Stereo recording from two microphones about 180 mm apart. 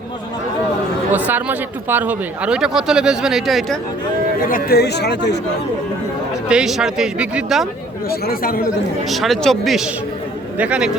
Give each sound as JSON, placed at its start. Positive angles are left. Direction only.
{"t": 1.3, "sound": "speech", "side_deg": -10}
{"t": 4.4, "sound": "speech", "side_deg": 55}
{"t": 6.5, "sound": "speech", "side_deg": -5}
{"t": 8.1, "sound": "speech", "side_deg": 55}
{"t": 9.0, "sound": "speech", "side_deg": 0}